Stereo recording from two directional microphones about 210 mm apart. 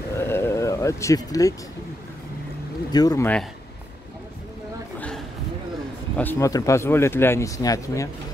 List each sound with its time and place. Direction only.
0.2 s a sound: 10° left (ahead or behind)
2.9 s speech: 20° left (ahead or behind)
6.1 s speech: 10° left (ahead or behind)